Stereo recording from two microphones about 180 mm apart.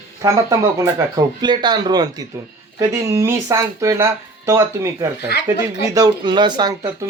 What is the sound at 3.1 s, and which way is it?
Speech, 15° right (ahead or behind).